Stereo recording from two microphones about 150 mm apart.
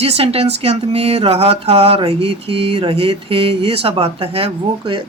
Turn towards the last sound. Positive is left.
turn(degrees=-35)  # may be behind; listen again after turning